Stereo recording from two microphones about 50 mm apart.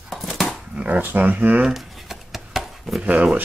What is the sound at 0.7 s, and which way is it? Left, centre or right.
Speech, right.